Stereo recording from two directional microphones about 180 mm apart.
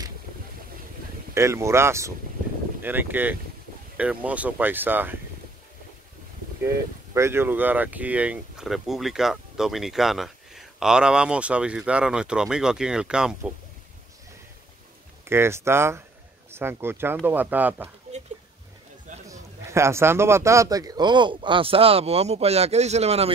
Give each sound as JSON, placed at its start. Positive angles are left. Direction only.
{"t": 1.3, "sound": "speech", "side_deg": -15}
{"t": 7.2, "sound": "speech", "side_deg": -15}
{"t": 15.2, "sound": "speech", "side_deg": -15}
{"t": 19.2, "sound": "a man's voice", "side_deg": -15}